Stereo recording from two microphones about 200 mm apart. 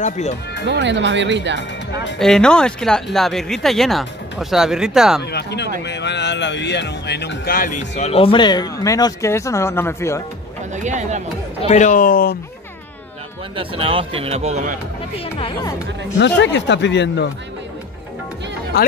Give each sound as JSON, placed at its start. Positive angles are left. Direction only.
{"t": 0.0, "sound": "speech", "side_deg": 35}
{"t": 0.7, "sound": "speech", "side_deg": -60}
{"t": 1.6, "sound": "speech", "side_deg": 60}
{"t": 2.1, "sound": "speech", "side_deg": 0}
{"t": 5.2, "sound": "speech", "side_deg": 55}
{"t": 10.7, "sound": "speech", "side_deg": -35}
{"t": 11.6, "sound": "speech", "side_deg": 35}
{"t": 13.6, "sound": "a man's voice", "side_deg": -25}
{"t": 15.1, "sound": "speech", "side_deg": 25}
{"t": 16.2, "sound": "speech", "side_deg": 60}